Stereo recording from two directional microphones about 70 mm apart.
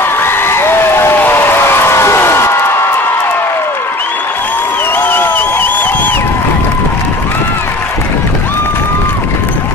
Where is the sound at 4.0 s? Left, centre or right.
Left.